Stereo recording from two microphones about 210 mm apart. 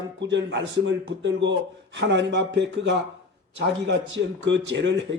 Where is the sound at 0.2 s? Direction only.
60° right (ahead or behind).